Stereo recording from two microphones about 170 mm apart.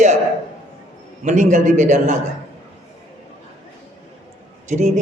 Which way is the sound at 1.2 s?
45° right (ahead or behind).